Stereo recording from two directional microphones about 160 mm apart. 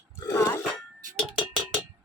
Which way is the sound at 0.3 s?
20° left (ahead or behind).